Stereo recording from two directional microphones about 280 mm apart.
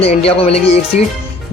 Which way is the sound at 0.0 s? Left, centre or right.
Left.